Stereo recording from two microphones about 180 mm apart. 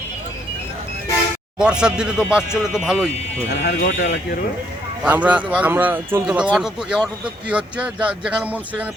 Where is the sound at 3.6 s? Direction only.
60° left (ahead or behind).